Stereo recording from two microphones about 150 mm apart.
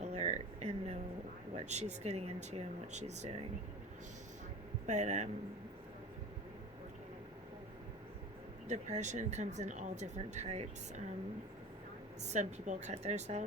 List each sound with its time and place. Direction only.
0.0 s a sound: 45° right (ahead or behind)
1.5 s speech: 50° right (ahead or behind)
4.9 s speech: 50° right (ahead or behind)
8.6 s speech: 50° right (ahead or behind)
12.2 s speech: 50° right (ahead or behind)